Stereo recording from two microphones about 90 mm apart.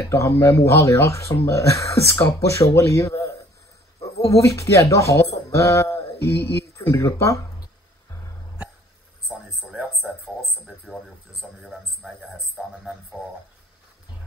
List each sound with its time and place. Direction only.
0.0 s speech: 30° left (ahead or behind)
9.3 s a sound: 5° right (ahead or behind)
11.6 s a man's voice: centre (ahead or behind)